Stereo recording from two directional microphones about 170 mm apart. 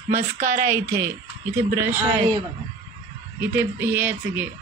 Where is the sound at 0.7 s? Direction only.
15° right (ahead or behind).